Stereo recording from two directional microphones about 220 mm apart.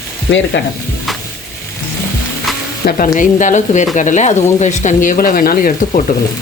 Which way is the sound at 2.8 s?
35° left (ahead or behind).